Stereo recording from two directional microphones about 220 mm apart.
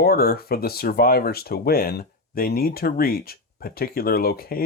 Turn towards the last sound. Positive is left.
turn(degrees=40)  # may be behind; listen again after turning